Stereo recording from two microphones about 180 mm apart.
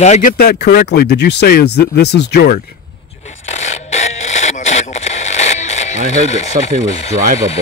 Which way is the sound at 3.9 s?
40° left (ahead or behind).